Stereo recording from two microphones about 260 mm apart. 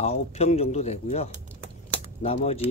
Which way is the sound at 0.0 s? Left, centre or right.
Left.